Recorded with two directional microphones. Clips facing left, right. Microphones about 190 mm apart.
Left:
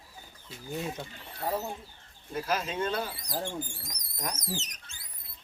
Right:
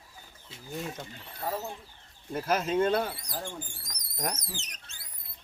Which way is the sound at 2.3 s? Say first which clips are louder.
Right 4 dB; 50° right (ahead or behind).